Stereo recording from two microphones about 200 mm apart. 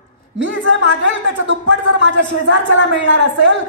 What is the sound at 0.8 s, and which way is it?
Speech, 70° right (ahead or behind).